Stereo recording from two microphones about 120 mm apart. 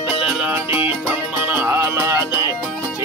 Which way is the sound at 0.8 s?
20° right (ahead or behind).